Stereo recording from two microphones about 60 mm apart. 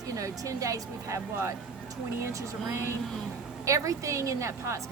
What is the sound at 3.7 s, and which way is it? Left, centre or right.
A woman's voice, right.